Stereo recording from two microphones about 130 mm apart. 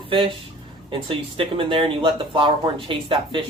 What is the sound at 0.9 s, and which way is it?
Speech, 40° right (ahead or behind).